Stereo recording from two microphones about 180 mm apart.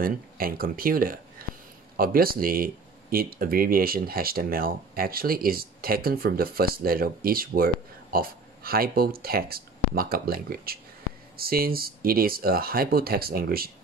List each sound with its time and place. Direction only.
0.0 s speech: 55° right (ahead or behind)